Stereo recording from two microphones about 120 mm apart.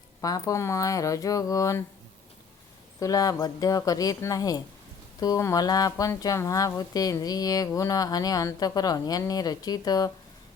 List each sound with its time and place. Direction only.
0.2 s speech: 30° left (ahead or behind)
3.0 s speech: 30° left (ahead or behind)